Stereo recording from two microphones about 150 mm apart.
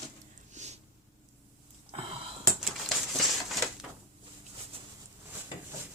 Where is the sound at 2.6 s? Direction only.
Centre (ahead or behind).